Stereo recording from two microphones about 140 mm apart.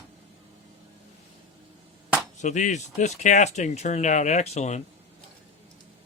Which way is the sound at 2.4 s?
60° left (ahead or behind).